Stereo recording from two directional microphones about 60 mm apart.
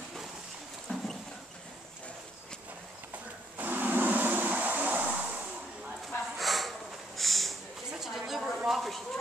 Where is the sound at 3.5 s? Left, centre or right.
Right.